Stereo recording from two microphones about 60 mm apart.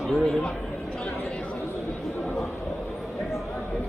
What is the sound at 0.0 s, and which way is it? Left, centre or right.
Speech, centre.